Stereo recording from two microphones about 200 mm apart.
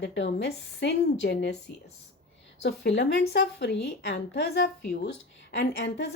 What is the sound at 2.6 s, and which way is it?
Speech, 60° left (ahead or behind).